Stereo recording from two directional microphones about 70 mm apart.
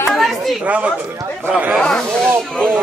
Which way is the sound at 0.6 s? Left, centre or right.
Centre.